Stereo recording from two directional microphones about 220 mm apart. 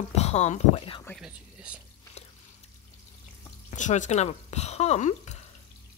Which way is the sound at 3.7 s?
35° left (ahead or behind).